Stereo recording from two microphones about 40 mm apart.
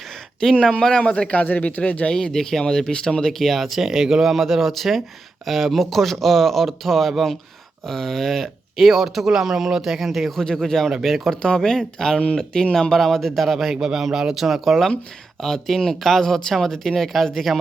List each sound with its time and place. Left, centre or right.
0.8 s speech: centre
1.0 s speech: left
1.3 s speech: left
2.1 s speech: centre
10.3 s speech: centre
11.4 s speech: centre
13.7 s speech: centre
15.4 s speech: centre